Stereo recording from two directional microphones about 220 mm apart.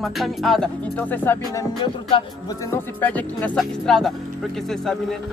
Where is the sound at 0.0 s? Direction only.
Centre (ahead or behind).